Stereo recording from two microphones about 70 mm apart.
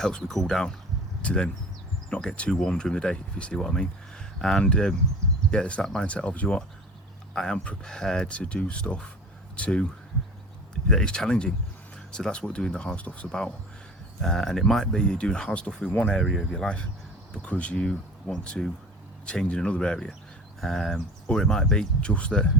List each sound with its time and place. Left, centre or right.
0.0 s speech: centre
10.8 s speech: centre
14.2 s speech: centre
16.2 s speech: centre